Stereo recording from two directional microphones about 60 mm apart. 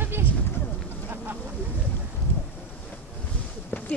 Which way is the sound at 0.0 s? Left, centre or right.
Right.